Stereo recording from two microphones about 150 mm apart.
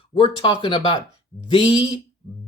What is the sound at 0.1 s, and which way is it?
Speech, 35° left (ahead or behind).